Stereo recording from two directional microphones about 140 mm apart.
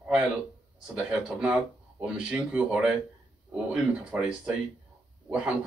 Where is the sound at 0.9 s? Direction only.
10° right (ahead or behind).